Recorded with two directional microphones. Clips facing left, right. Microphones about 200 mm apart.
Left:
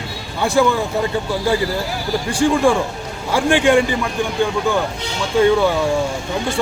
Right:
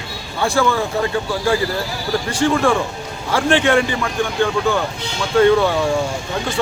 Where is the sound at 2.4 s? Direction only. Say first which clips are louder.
Left 2 dB; 15° left (ahead or behind).